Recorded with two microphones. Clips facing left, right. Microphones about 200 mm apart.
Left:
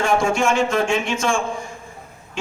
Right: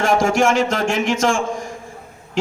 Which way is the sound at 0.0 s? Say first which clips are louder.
Right 3 dB; 90° right.